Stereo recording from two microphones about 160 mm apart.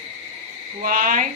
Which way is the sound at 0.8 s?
60° right (ahead or behind).